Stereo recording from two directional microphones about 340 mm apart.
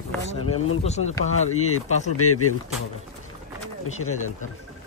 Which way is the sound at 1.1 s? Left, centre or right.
Centre.